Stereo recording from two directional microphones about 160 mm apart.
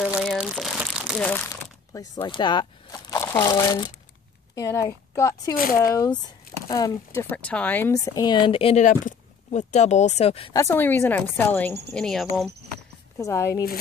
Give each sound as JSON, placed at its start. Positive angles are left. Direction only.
{"t": 0.0, "sound": "crumpling", "side_deg": -5}
{"t": 1.5, "sound": "a sound", "side_deg": 20}
{"t": 3.5, "sound": "speech", "side_deg": 25}
{"t": 5.6, "sound": "speech", "side_deg": 60}
{"t": 5.9, "sound": "speech", "side_deg": 20}
{"t": 7.9, "sound": "speech", "side_deg": 25}
{"t": 8.8, "sound": "speech", "side_deg": 50}
{"t": 10.5, "sound": "speech", "side_deg": 15}
{"t": 13.2, "sound": "speech", "side_deg": 20}